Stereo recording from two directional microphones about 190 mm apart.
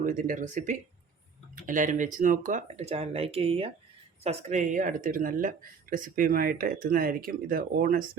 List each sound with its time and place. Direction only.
0.0 s speech: 45° right (ahead or behind)